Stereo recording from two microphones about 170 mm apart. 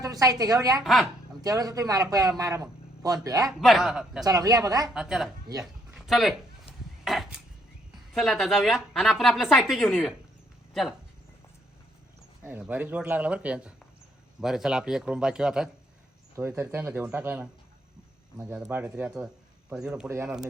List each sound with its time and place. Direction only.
0.0 s a man's voice: 20° right (ahead or behind)
3.6 s a woman's voice: centre (ahead or behind)
4.2 s a man's voice: 20° right (ahead or behind)
4.9 s a woman's voice: 5° right (ahead or behind)
5.9 s a sound: centre (ahead or behind)
8.1 s a woman's voice: centre (ahead or behind)
12.4 s a man's voice: 10° right (ahead or behind)
16.3 s a man's voice: 15° right (ahead or behind)